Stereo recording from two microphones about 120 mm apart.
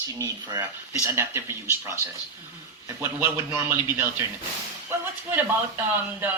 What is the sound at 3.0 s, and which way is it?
Speech, 20° right (ahead or behind).